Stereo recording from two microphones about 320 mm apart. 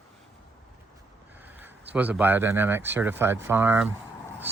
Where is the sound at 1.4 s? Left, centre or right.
Centre.